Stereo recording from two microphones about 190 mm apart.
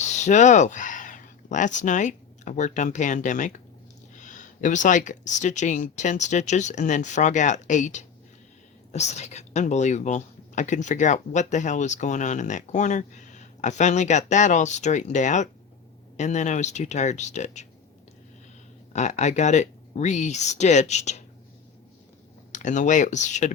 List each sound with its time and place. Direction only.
0.0 s speech: 40° left (ahead or behind)
18.9 s speech: 40° left (ahead or behind)
22.5 s speech: 40° left (ahead or behind)